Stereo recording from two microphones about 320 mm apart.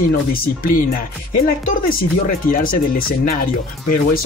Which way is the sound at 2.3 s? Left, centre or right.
Left.